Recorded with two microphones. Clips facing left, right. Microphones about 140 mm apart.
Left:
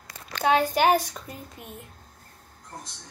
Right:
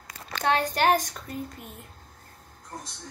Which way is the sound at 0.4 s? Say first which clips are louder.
Left 3 dB; 10° left (ahead or behind).